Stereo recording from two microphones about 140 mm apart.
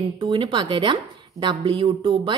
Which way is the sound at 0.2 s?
35° right (ahead or behind).